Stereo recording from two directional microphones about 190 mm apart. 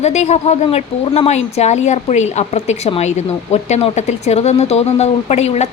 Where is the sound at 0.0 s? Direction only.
35° left (ahead or behind).